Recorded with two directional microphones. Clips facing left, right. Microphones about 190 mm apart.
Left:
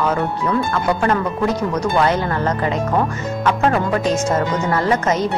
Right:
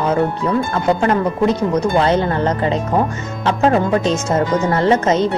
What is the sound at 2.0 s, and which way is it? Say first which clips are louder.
Speech: right 1 dB; 25° right (ahead or behind).